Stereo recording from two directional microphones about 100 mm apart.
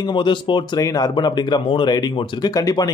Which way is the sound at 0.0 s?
55° left (ahead or behind).